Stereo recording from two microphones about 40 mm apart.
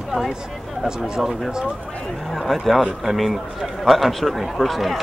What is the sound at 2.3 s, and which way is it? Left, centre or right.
Speech, centre.